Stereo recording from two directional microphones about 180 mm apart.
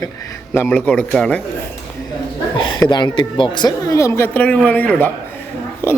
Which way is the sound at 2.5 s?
25° left (ahead or behind).